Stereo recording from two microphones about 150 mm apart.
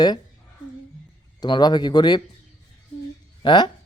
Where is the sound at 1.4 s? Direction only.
30° left (ahead or behind).